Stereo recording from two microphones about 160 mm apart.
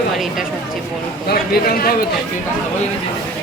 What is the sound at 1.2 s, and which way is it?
Speech, 70° left (ahead or behind).